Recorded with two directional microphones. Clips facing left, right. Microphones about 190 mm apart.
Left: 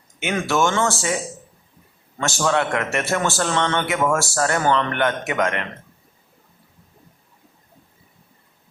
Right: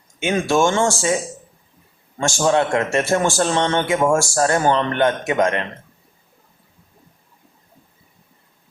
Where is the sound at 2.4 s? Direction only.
25° right (ahead or behind).